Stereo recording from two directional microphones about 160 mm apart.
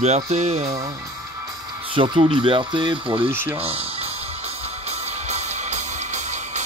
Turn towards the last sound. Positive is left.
turn(degrees=-45)  # may be behind; listen again after turning